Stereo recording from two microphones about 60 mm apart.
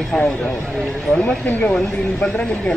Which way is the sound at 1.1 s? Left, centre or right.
Left.